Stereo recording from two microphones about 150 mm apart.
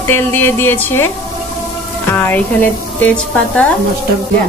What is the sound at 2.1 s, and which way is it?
A woman's voice, 10° left (ahead or behind).